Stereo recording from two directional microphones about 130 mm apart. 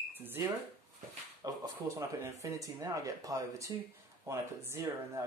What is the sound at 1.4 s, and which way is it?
Speech, 25° right (ahead or behind).